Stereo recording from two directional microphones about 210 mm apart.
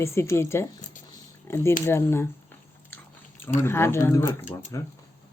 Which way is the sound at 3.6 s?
10° left (ahead or behind).